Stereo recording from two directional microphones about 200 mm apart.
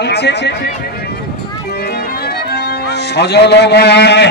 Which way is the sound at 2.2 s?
55° left (ahead or behind).